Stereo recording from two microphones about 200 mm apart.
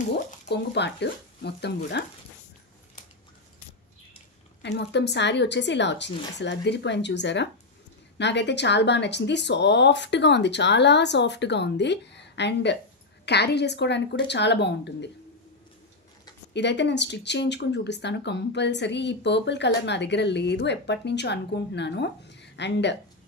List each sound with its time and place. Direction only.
0.5 s speech: 60° left (ahead or behind)
4.6 s speech: 60° left (ahead or behind)
16.5 s speech: 60° left (ahead or behind)